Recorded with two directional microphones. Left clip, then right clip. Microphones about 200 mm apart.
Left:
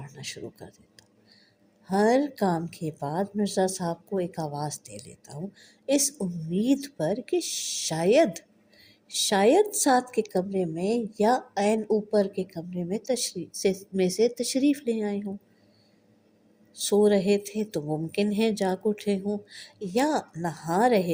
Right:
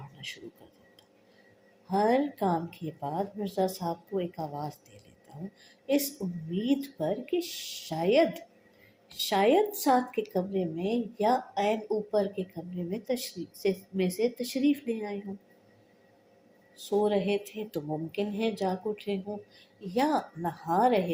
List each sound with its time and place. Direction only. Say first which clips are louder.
0.6 s a woman's voice: left 10 dB; 45° left (ahead or behind)
1.9 s a woman's voice: left 3 dB; 50° left (ahead or behind)
16.7 s a woman's voice: left 5 dB; 50° left (ahead or behind)